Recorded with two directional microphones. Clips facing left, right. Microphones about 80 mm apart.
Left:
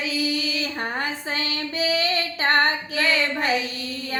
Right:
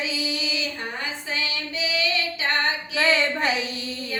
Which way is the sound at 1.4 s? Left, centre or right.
Left.